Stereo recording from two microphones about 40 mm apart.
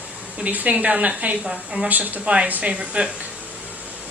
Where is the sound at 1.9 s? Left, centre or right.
Right.